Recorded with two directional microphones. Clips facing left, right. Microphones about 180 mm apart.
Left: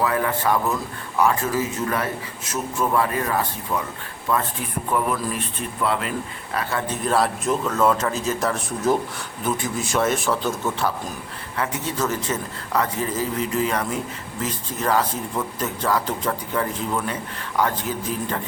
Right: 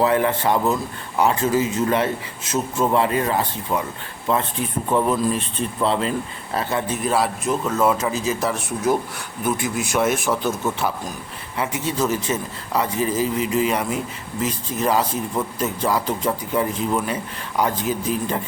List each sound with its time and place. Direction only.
0.0 s a man's voice: 25° right (ahead or behind)
7.0 s a man's voice: centre (ahead or behind)